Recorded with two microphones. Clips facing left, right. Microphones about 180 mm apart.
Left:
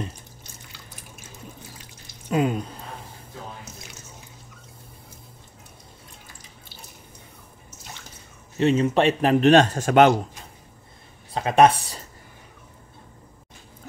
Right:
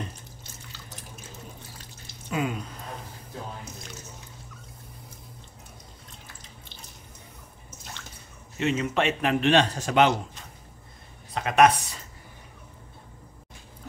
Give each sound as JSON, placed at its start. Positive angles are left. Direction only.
{"t": 2.2, "sound": "a sound", "side_deg": 40}
{"t": 8.5, "sound": "speech", "side_deg": 35}
{"t": 11.3, "sound": "speech", "side_deg": 30}